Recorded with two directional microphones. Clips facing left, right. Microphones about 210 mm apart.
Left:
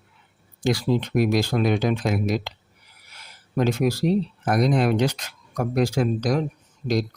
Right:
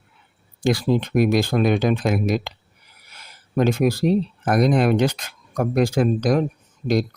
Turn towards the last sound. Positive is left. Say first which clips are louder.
# right 3 dB
turn(degrees=-55)  # may be behind; listen again after turning